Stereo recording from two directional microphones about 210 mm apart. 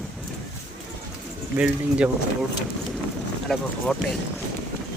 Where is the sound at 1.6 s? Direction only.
5° right (ahead or behind).